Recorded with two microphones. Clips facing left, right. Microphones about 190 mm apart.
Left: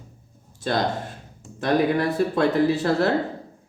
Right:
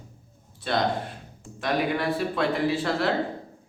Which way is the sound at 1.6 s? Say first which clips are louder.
Left 5 dB; 40° left (ahead or behind).